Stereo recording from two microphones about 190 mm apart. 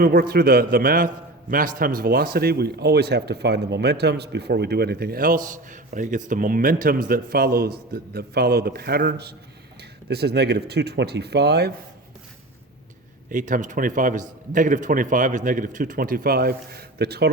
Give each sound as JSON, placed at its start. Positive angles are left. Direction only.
{"t": 0.0, "sound": "a man's voice", "side_deg": -50}
{"t": 13.3, "sound": "a man's voice", "side_deg": -40}